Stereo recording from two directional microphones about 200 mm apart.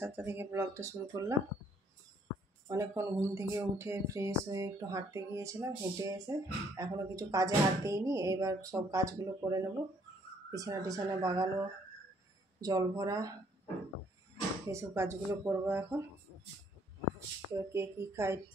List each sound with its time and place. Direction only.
0.0 s speech: 10° right (ahead or behind)
2.7 s speech: 15° right (ahead or behind)
12.5 s speech: 20° right (ahead or behind)
14.7 s speech: 15° right (ahead or behind)
17.6 s speech: 15° right (ahead or behind)